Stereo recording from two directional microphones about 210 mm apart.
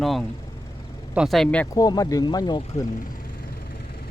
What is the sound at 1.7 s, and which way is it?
Speech, 15° left (ahead or behind).